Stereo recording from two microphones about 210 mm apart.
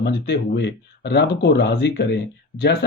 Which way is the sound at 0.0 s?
55° left (ahead or behind).